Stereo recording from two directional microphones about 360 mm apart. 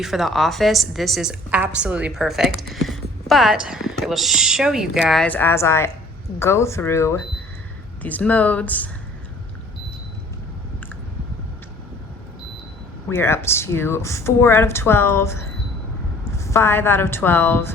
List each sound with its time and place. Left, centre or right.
0.0 s a woman's voice: centre
13.1 s speech: centre